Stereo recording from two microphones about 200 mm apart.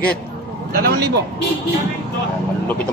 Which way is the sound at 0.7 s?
50° right (ahead or behind).